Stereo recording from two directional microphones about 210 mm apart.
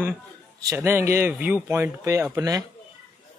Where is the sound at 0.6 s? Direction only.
15° right (ahead or behind).